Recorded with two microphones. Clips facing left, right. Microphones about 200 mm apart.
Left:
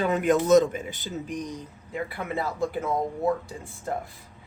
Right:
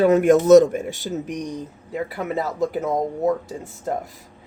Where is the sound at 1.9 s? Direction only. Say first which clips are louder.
Right 5 dB; 40° right (ahead or behind).